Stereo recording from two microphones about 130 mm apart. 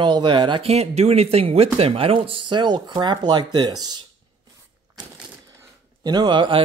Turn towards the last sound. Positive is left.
turn(degrees=-40)  # may be behind; listen again after turning